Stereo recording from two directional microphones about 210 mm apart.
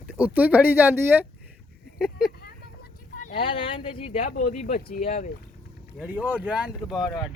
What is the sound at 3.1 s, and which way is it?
Fowl, 40° left (ahead or behind).